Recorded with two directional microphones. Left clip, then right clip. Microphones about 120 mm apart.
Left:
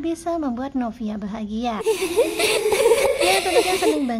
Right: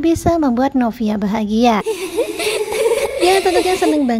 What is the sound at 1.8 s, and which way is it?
Speech, centre (ahead or behind).